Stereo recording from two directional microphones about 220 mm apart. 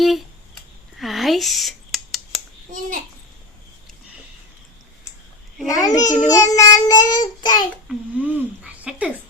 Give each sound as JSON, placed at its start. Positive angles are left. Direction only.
{"t": 0.0, "sound": "a sound", "side_deg": 0}
{"t": 5.6, "sound": "a child's voice", "side_deg": 15}
{"t": 6.8, "sound": "child singing", "side_deg": 20}
{"t": 7.9, "sound": "speech", "side_deg": -5}